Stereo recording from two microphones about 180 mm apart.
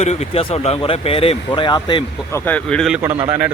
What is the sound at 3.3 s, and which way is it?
Speech, 10° right (ahead or behind).